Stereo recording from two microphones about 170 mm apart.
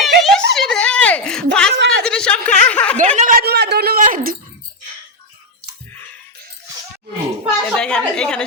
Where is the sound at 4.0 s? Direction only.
55° right (ahead or behind).